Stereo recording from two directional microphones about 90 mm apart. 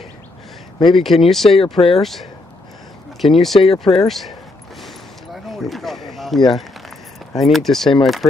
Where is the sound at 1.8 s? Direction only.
45° left (ahead or behind).